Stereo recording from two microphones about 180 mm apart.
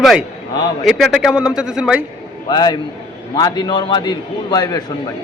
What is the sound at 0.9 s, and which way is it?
A man's voice, centre (ahead or behind).